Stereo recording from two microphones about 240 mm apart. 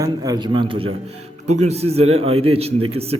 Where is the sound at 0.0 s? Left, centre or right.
Centre.